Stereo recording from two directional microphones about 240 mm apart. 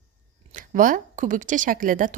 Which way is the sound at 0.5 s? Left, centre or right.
Right.